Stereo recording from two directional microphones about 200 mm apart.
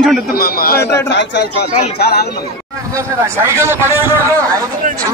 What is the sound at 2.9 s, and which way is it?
A man's voice, 15° right (ahead or behind).